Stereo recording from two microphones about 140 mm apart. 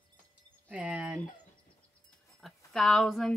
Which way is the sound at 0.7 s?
10° right (ahead or behind).